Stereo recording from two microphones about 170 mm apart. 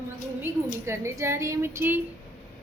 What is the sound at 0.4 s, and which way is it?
Speech, 15° right (ahead or behind).